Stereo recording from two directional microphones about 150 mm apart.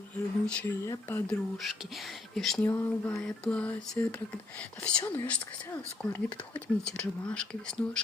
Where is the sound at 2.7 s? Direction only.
15° left (ahead or behind).